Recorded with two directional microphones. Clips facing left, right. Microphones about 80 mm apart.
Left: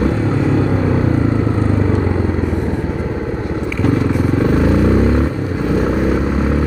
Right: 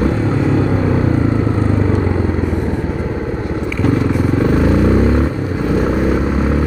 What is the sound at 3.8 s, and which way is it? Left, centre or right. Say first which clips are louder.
Vehicle: even; right.